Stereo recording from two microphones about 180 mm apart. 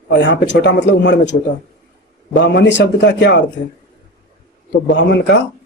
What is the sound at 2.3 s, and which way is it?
A man's voice, 80° left.